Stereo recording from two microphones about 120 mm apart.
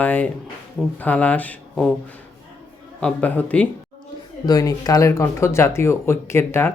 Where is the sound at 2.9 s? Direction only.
10° left (ahead or behind).